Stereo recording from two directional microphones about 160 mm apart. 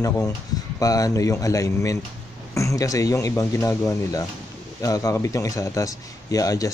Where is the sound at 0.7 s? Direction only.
20° left (ahead or behind).